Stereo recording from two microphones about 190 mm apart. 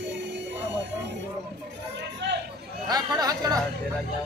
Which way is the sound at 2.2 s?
65° right (ahead or behind).